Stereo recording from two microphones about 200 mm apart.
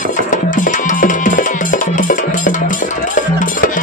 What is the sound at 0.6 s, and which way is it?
Music, 40° left (ahead or behind).